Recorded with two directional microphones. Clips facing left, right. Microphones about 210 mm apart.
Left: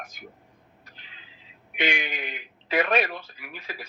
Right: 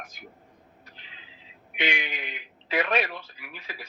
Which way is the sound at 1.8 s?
45° left (ahead or behind).